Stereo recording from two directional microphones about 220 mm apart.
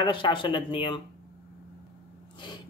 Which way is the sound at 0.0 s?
20° left (ahead or behind).